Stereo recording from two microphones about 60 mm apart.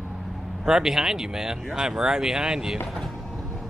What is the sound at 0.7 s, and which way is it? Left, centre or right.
Speech, centre.